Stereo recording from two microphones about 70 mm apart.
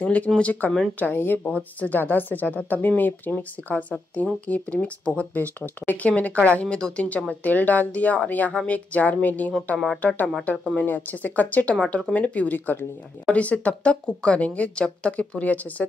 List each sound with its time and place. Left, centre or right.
0.0 s speech: left